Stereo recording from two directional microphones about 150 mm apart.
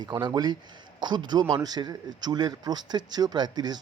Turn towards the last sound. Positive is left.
turn(degrees=-30)  # may be behind; listen again after turning